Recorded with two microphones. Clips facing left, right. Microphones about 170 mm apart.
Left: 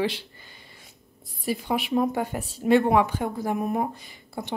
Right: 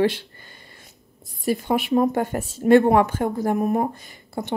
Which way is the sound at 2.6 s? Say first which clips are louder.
Right 4 dB; 45° right (ahead or behind).